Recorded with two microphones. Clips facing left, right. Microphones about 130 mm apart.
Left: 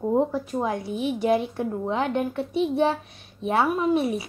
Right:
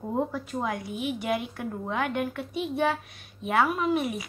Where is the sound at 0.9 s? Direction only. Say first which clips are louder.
Left 4 dB; 15° right (ahead or behind).